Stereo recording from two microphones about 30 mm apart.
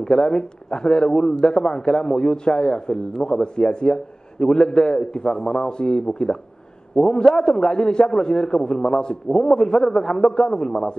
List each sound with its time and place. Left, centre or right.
0.0 s a man's voice: left